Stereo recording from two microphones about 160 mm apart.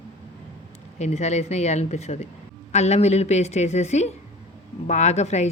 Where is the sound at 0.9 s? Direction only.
45° left (ahead or behind).